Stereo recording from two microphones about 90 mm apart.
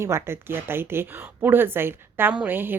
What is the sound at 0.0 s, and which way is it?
A woman's voice, 30° right (ahead or behind).